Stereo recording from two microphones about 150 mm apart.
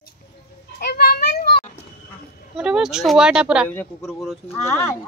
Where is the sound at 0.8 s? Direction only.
90° left.